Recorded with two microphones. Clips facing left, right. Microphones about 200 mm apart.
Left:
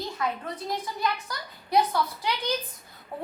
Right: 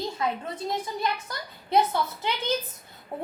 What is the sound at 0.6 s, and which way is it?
A woman's voice, 25° right (ahead or behind).